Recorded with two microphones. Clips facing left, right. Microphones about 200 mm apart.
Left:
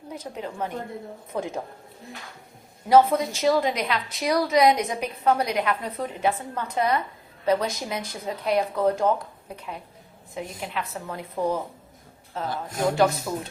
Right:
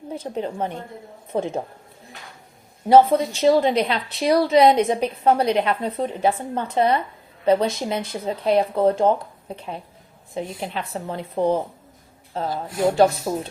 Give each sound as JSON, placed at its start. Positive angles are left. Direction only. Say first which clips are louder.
{"t": 0.1, "sound": "a woman's voice", "louder": "right 6 dB", "side_deg": -30}
{"t": 2.9, "sound": "a woman's voice", "louder": "right 4 dB", "side_deg": -30}